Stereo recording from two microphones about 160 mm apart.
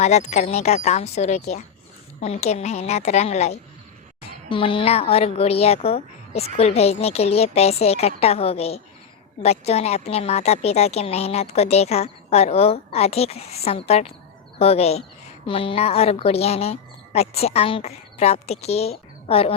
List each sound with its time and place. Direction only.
0.0 s a woman's voice: 45° left (ahead or behind)